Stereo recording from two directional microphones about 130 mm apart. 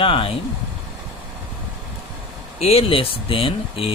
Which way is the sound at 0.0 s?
40° left (ahead or behind).